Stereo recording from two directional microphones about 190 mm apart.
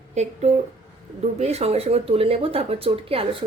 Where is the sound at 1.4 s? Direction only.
35° right (ahead or behind).